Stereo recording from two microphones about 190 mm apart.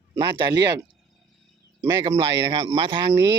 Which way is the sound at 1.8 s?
15° right (ahead or behind).